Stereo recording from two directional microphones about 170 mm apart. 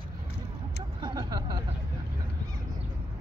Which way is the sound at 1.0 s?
25° right (ahead or behind).